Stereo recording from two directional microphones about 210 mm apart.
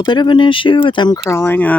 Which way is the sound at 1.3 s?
10° left (ahead or behind).